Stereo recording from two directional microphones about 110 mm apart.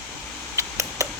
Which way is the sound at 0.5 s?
30° right (ahead or behind).